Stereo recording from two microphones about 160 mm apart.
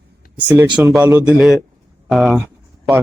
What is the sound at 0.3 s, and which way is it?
Speech, 10° right (ahead or behind).